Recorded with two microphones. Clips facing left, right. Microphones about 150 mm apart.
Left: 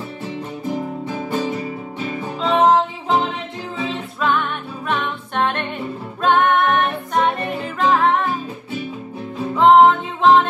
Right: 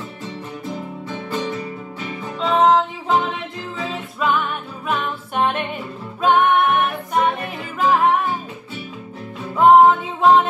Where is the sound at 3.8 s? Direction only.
5° right (ahead or behind).